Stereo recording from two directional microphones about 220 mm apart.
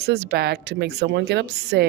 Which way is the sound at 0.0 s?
50° right (ahead or behind).